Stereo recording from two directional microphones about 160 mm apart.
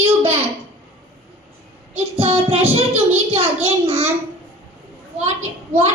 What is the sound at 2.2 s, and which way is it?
Child singing, 40° right (ahead or behind).